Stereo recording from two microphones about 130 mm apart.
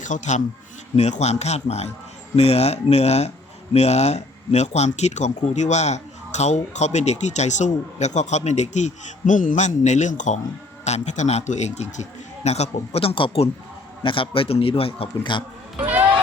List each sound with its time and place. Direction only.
0.0 s a man's voice: 70° left (ahead or behind); by 15.4 s 40° left (ahead or behind)